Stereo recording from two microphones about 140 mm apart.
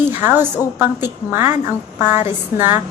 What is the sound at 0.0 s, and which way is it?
A woman's voice, 15° right (ahead or behind).